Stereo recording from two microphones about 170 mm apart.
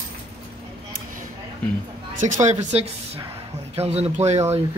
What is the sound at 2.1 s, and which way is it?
Speech, 45° right (ahead or behind).